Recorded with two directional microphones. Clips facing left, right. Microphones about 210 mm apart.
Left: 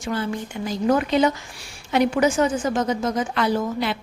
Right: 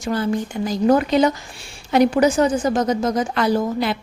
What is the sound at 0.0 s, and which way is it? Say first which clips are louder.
A woman's voice: right 5 dB; 40° right (ahead or behind).